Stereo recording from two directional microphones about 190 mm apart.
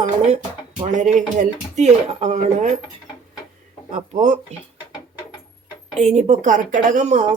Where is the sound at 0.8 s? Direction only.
40° right (ahead or behind).